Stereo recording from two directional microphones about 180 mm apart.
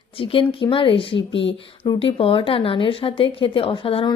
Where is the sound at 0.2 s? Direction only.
30° left (ahead or behind).